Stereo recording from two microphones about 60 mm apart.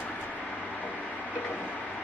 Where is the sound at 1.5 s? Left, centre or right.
Centre.